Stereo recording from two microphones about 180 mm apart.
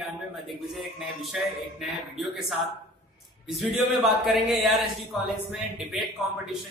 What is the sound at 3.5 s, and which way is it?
Speech, centre (ahead or behind).